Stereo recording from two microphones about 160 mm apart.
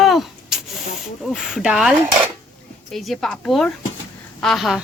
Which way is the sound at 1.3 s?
5° right (ahead or behind).